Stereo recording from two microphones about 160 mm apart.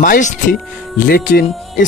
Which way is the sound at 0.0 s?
55° left (ahead or behind).